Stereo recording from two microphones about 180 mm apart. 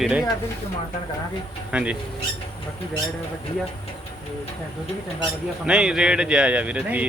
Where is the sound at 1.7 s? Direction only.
5° right (ahead or behind).